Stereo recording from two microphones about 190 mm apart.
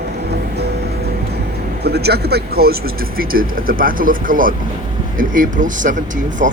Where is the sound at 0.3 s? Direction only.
60° right (ahead or behind).